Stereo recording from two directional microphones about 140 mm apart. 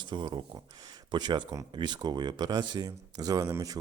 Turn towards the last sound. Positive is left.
turn(degrees=-25)  # may be behind; listen again after turning